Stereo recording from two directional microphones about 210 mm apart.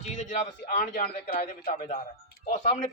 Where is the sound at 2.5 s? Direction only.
35° left (ahead or behind).